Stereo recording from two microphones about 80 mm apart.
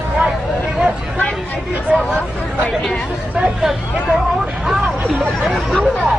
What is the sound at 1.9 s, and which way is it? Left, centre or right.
Hubbub, centre.